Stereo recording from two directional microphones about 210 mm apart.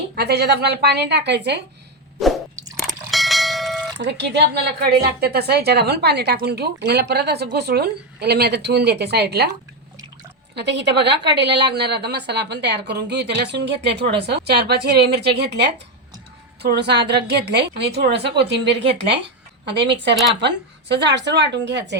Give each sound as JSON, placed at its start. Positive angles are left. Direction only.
{"t": 0.2, "sound": "speech", "side_deg": -50}
{"t": 2.7, "sound": "clang", "side_deg": 0}
{"t": 3.9, "sound": "speech", "side_deg": -55}
{"t": 10.5, "sound": "speech", "side_deg": -55}
{"t": 20.4, "sound": "speech", "side_deg": -55}